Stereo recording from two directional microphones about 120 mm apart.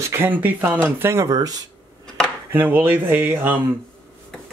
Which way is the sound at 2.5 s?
15° right (ahead or behind).